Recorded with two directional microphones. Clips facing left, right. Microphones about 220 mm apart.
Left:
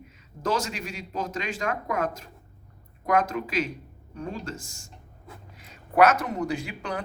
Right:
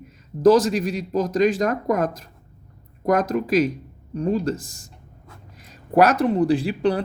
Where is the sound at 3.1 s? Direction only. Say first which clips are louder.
Right 6 dB; 40° right (ahead or behind).